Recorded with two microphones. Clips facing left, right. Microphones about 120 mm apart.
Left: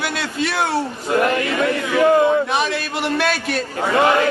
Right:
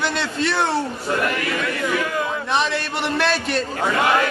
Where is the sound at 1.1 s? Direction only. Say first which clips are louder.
Left 6 dB; 25° left (ahead or behind).